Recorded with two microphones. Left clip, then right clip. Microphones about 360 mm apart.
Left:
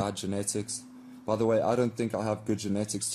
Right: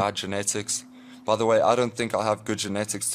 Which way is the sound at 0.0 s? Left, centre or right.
Right.